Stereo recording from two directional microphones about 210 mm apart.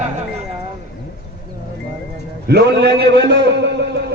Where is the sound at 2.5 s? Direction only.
50° right (ahead or behind).